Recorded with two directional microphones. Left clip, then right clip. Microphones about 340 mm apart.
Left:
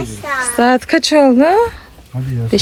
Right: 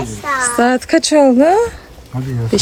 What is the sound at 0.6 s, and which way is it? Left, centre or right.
Speech, centre.